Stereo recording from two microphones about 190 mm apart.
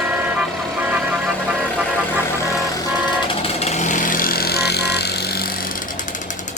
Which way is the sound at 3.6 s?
35° left (ahead or behind).